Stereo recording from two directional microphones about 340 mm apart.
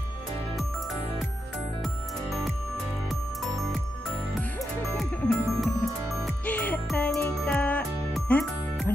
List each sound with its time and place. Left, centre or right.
4.9 s music: centre